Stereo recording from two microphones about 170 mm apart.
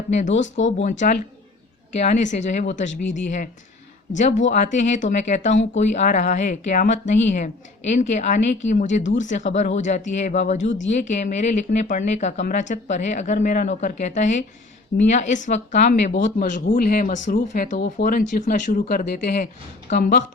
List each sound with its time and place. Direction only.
0.1 s speech: 45° left (ahead or behind)